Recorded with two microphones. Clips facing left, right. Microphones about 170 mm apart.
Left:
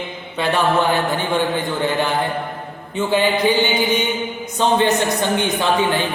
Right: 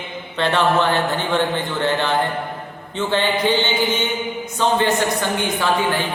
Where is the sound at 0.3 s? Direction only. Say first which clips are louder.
Even; 10° left (ahead or behind).